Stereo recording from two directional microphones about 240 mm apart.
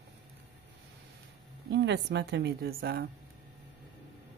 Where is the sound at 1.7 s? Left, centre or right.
Right.